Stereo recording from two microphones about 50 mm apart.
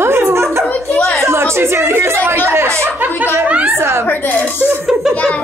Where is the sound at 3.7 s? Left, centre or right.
Right.